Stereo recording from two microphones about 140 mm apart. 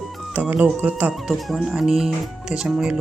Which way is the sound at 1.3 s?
Centre (ahead or behind).